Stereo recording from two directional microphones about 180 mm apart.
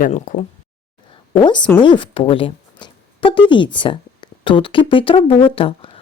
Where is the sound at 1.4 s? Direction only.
25° left (ahead or behind).